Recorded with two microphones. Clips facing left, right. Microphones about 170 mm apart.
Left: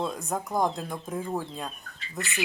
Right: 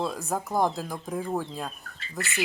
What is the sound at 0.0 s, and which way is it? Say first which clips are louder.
Speech: right 1 dB; centre (ahead or behind).